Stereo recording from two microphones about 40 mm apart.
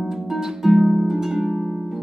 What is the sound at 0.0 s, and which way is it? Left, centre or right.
Harp, centre.